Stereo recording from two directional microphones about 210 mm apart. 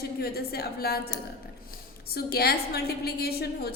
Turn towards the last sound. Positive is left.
turn(degrees=50)  # may be behind; listen again after turning